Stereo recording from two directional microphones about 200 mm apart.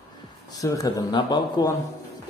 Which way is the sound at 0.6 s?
15° left (ahead or behind).